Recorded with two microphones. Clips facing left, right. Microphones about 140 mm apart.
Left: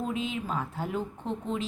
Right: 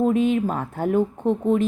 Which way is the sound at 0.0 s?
55° right (ahead or behind).